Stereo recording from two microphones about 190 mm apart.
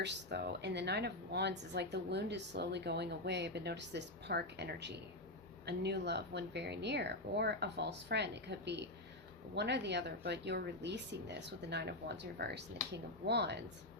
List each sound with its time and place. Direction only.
0.0 s a woman's voice: 60° right (ahead or behind)